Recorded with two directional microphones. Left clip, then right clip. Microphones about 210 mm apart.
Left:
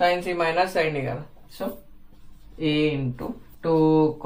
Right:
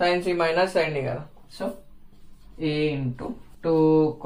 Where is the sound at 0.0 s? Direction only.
15° right (ahead or behind).